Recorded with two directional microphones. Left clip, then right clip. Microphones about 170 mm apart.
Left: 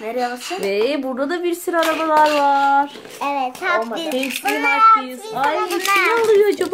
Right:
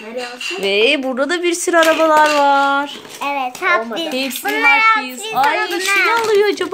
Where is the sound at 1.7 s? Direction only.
50° right (ahead or behind).